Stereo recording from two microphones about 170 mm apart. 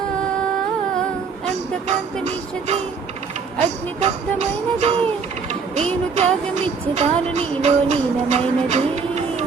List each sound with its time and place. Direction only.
1.5 s music: 40° right (ahead or behind)